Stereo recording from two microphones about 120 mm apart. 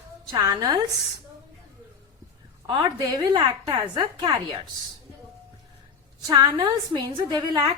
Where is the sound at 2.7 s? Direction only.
35° right (ahead or behind).